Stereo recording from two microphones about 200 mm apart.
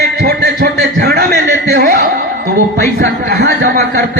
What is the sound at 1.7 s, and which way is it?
Chuckle, 50° right (ahead or behind).